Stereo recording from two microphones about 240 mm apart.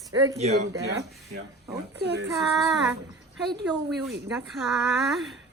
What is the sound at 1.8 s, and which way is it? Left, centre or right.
Speech, right.